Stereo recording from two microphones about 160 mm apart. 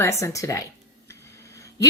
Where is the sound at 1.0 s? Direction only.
15° left (ahead or behind).